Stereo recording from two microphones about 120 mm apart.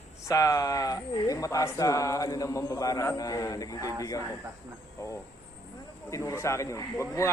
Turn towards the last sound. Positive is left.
turn(degrees=25)  # may be behind; listen again after turning